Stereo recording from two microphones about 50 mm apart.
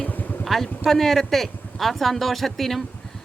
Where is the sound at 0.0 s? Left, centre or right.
Left.